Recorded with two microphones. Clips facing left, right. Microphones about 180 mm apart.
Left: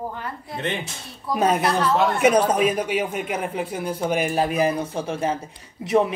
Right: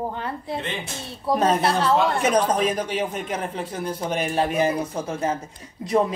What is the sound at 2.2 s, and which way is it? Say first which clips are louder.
Speech: left 3 dB; 10° left (ahead or behind).